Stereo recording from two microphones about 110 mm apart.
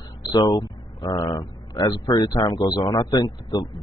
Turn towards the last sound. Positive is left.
turn(degrees=35)  # may be behind; listen again after turning